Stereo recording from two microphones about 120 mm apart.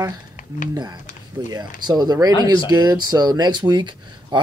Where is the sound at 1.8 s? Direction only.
35° right (ahead or behind).